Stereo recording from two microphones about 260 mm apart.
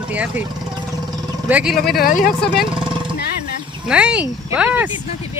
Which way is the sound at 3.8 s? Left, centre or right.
Centre.